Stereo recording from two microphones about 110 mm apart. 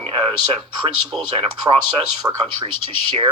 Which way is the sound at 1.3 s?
60° right (ahead or behind).